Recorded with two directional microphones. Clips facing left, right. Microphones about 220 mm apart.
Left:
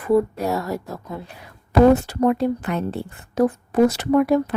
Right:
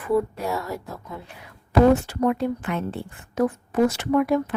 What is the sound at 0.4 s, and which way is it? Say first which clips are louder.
Speech: left 4 dB; 40° left (ahead or behind).